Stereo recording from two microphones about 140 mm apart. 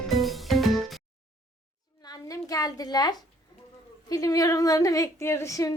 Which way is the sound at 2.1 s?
25° left (ahead or behind).